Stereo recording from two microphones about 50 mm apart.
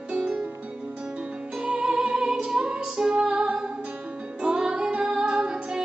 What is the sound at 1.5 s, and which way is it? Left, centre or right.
Music, centre.